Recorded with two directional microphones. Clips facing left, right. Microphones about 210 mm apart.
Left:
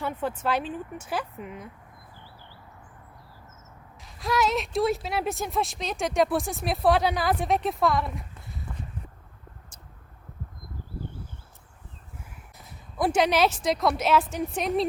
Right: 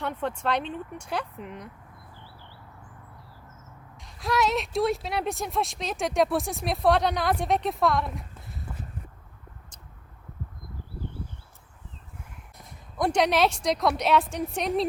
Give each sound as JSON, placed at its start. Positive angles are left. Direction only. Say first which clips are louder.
{"t": 0.0, "sound": "speech", "louder": "even", "side_deg": 5}
{"t": 4.0, "sound": "speech", "louder": "even", "side_deg": 0}
{"t": 12.5, "sound": "speech", "louder": "left 1 dB", "side_deg": 5}